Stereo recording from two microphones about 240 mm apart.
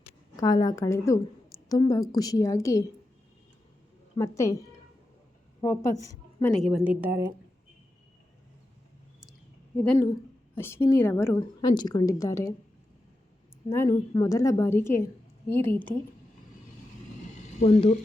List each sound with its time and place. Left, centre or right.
0.3 s a woman's voice: centre
4.2 s a woman's voice: centre
6.4 s a woman's voice: centre
9.8 s a woman's voice: centre
13.7 s a woman's voice: centre
17.6 s speech: left